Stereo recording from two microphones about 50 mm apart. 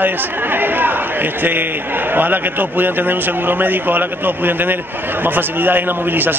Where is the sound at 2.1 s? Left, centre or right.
Right.